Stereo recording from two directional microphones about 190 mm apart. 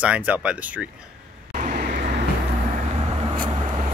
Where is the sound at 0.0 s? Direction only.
10° right (ahead or behind).